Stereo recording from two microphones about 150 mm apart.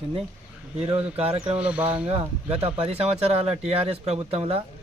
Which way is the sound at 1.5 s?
10° right (ahead or behind).